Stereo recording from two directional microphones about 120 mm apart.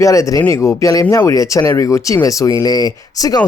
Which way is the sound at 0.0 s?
25° left (ahead or behind).